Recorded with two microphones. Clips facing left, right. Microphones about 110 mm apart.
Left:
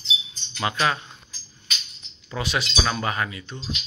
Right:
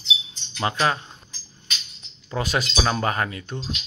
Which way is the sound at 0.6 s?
30° right (ahead or behind).